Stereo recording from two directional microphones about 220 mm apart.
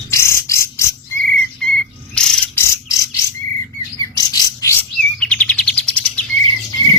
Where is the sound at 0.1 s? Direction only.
10° left (ahead or behind).